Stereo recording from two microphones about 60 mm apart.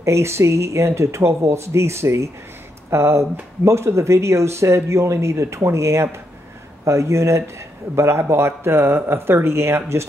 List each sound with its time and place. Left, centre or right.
0.0 s speech: right